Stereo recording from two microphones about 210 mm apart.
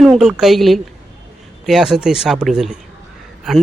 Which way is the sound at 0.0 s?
Centre (ahead or behind).